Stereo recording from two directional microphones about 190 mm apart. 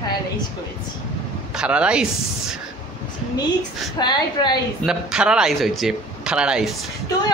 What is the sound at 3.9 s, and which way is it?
Speech, 20° left (ahead or behind).